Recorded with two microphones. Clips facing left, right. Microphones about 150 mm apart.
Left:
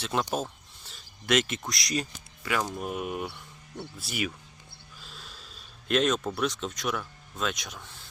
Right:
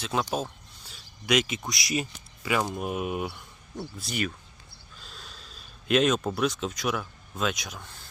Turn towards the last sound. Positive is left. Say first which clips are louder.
# right 2 dB
turn(degrees=0)  # may be behind; listen again after turning